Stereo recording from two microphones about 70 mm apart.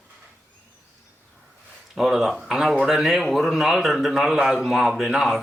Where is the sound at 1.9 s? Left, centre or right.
Centre.